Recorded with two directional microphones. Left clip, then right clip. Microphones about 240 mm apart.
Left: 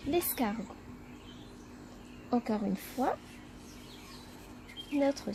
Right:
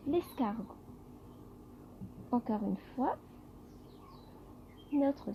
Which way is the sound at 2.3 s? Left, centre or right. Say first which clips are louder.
Left 3 dB; left.